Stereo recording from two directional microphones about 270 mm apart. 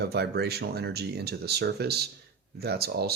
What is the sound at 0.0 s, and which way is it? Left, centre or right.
Speech, right.